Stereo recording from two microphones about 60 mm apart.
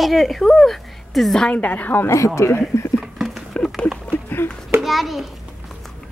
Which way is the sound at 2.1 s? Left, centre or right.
Left.